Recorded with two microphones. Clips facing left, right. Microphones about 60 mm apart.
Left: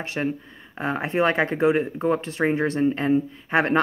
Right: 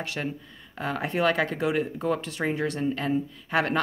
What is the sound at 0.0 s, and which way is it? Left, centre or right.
Speech, left.